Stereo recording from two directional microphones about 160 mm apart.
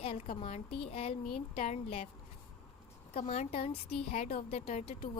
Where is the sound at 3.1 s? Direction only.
45° left (ahead or behind).